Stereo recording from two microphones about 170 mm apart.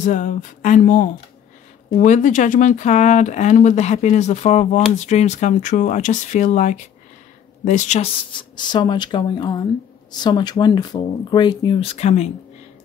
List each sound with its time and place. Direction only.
0.0 s speech: 50° left (ahead or behind)
8.3 s speech: 25° left (ahead or behind)